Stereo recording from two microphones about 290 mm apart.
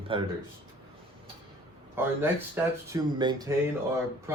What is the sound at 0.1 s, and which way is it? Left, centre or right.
Speech, centre.